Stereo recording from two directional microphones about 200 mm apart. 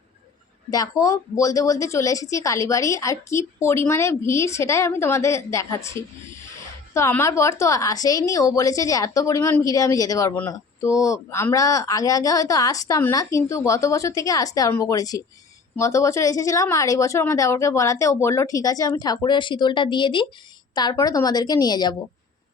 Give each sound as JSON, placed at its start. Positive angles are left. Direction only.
{"t": 0.7, "sound": "a woman's voice", "side_deg": 15}